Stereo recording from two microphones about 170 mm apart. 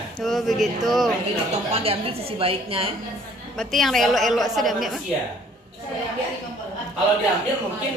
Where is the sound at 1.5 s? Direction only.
40° right (ahead or behind).